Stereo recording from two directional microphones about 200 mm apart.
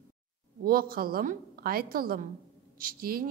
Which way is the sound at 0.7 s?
45° right (ahead or behind).